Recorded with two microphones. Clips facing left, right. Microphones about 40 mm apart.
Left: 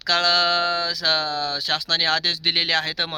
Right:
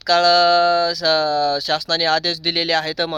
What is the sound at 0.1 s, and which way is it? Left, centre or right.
Speech, left.